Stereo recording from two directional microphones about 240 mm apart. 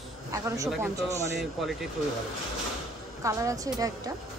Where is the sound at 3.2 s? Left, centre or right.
Centre.